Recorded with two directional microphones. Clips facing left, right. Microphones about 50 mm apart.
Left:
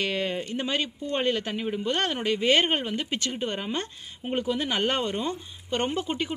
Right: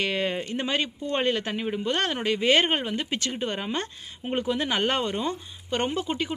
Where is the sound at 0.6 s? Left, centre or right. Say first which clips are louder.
Right 1 dB; centre.